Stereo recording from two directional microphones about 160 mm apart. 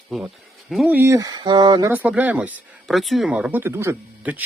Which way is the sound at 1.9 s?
10° right (ahead or behind).